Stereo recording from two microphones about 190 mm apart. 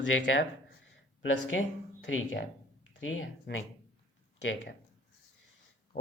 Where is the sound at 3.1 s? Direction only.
90° left.